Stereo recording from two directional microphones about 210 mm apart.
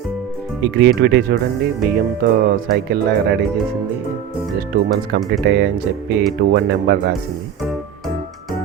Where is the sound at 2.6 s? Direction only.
50° right (ahead or behind).